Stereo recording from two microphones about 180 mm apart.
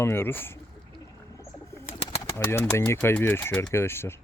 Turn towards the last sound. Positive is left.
turn(degrees=15)  # may be behind; listen again after turning